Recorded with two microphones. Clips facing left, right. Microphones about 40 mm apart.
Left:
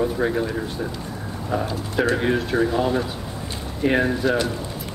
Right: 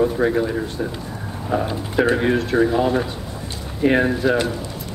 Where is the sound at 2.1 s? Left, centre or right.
Centre.